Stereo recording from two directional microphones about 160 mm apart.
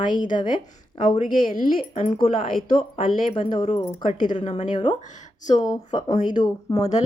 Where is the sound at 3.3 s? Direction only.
30° left (ahead or behind).